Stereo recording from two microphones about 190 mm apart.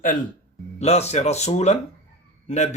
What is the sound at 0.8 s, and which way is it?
Speech, 35° left (ahead or behind).